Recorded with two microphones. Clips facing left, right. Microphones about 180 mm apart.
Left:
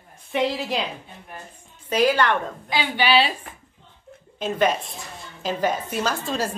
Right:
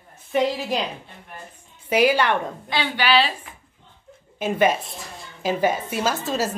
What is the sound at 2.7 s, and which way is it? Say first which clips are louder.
Speech: left 2 dB; 15° left (ahead or behind).